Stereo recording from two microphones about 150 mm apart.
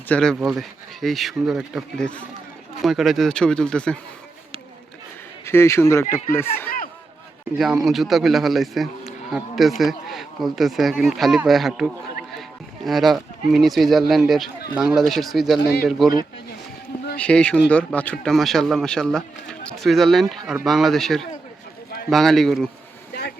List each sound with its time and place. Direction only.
0.1 s a man's voice: 5° left (ahead or behind)
5.5 s speech: 15° left (ahead or behind)
7.9 s a man's voice: centre (ahead or behind)
15.6 s speech: 90° left
17.2 s a man's voice: 5° left (ahead or behind)